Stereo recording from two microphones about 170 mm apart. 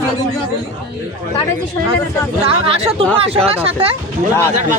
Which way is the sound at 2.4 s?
35° right (ahead or behind).